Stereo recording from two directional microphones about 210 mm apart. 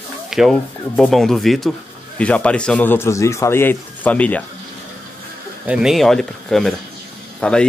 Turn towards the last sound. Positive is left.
turn(degrees=5)  # may be behind; listen again after turning